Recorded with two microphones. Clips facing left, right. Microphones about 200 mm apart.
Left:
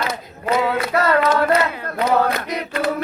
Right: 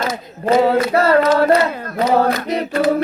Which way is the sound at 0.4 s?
30° right (ahead or behind).